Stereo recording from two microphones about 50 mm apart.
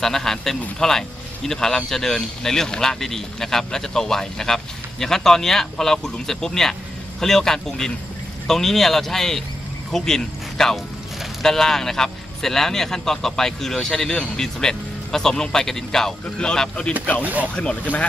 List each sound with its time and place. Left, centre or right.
0.0 s a man's voice: centre
17.2 s speech: right